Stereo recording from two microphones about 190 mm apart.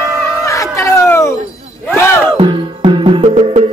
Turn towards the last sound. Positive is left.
turn(degrees=-30)  # may be behind; listen again after turning